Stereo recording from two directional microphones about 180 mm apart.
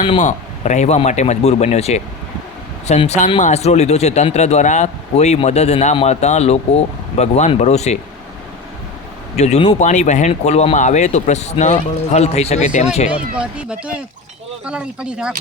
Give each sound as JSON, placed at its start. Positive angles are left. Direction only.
{"t": 0.0, "sound": "speech", "side_deg": 30}
{"t": 0.3, "sound": "speech", "side_deg": 40}
{"t": 9.3, "sound": "speech", "side_deg": 40}
{"t": 13.1, "sound": "speech", "side_deg": -5}